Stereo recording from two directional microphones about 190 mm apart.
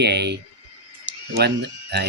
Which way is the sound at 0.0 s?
60° right (ahead or behind).